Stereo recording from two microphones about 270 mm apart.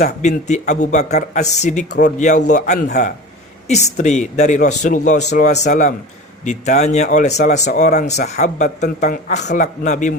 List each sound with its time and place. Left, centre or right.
0.0 s speech: left
1.9 s speech: left
2.1 s speech: left